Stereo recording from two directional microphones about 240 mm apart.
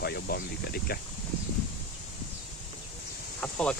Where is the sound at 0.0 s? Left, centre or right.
Left.